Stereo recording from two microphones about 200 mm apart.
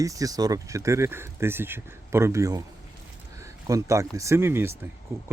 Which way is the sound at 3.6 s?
15° right (ahead or behind).